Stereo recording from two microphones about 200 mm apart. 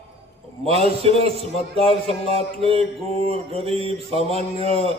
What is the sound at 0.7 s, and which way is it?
Mantra, 30° right (ahead or behind).